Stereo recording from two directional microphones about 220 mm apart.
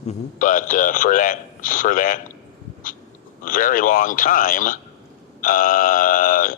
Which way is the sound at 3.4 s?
40° left (ahead or behind).